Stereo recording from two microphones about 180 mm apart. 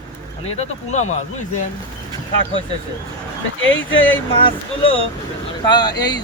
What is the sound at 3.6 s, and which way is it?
Speech, 90° left.